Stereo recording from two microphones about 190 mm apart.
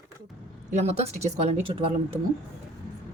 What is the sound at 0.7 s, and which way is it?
A woman's voice, 35° right (ahead or behind).